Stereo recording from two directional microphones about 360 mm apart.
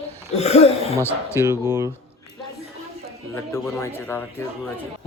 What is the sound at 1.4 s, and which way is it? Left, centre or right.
Speech, centre.